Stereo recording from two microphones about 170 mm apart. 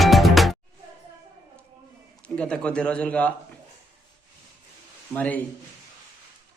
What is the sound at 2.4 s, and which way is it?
Speech, 5° left (ahead or behind).